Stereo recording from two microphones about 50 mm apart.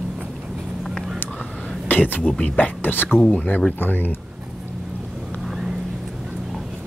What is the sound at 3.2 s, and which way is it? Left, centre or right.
Speech, left.